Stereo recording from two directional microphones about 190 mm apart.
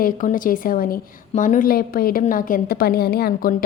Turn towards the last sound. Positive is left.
turn(degrees=50)  # may be behind; listen again after turning